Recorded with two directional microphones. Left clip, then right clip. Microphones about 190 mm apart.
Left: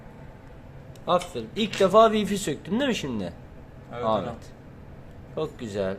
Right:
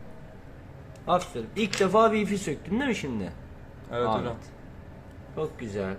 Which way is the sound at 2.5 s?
25° left (ahead or behind).